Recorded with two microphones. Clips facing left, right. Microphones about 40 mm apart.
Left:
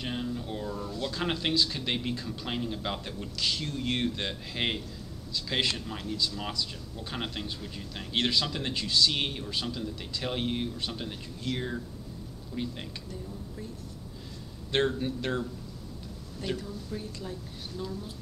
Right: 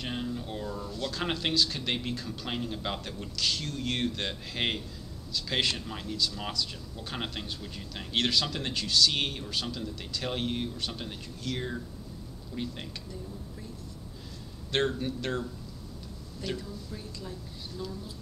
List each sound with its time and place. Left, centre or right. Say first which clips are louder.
0.0 s a sound: left 1 dB; centre
0.8 s speech: left 1 dB; centre
6.1 s a man's voice: right 1 dB; centre
14.7 s a man's voice: left 1 dB; centre
16.5 s speech: left 2 dB; centre
16.9 s a woman's voice: left 3 dB; centre